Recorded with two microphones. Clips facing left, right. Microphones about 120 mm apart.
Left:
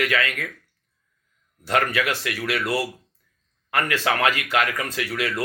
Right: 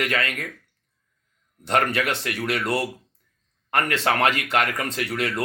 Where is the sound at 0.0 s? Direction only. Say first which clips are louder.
Left 2 dB; 25° right (ahead or behind).